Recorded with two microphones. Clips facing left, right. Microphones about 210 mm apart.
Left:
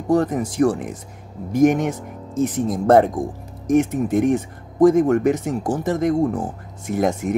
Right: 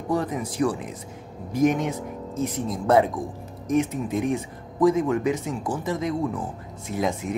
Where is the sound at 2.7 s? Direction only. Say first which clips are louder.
Left 5 dB; 50° left (ahead or behind).